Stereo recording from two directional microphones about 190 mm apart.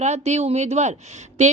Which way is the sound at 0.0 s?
35° right (ahead or behind).